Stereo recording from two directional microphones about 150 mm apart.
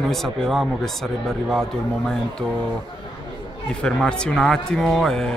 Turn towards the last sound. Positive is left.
turn(degrees=5)  # may be behind; listen again after turning